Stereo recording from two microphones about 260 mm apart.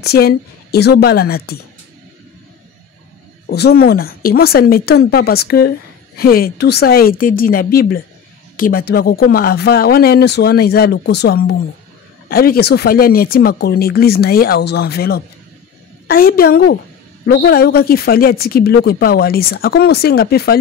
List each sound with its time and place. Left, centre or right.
0.0 s speech: left
3.4 s speech: left